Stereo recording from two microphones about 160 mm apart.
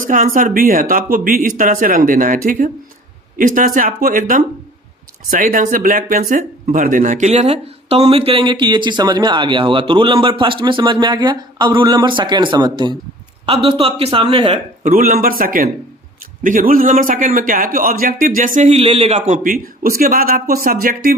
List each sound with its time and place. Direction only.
0.0 s a man's voice: 55° right (ahead or behind); by 14.6 s 35° right (ahead or behind)
14.8 s a man's voice: 60° right (ahead or behind); by 19.4 s 40° right (ahead or behind)
19.4 s a man's voice: 60° right (ahead or behind)